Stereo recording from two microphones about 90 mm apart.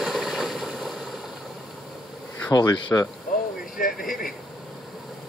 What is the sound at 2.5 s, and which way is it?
Speech, 40° left (ahead or behind).